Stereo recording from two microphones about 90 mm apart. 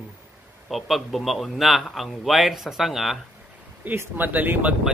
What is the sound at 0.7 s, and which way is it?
Speech, centre (ahead or behind).